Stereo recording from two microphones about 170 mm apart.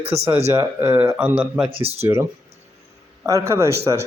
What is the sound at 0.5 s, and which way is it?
Speech, 15° right (ahead or behind).